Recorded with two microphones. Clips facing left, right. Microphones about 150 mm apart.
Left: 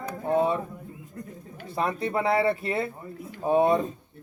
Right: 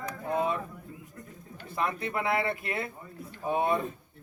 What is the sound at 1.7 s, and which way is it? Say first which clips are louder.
Speech: left 4 dB; 35° left (ahead or behind).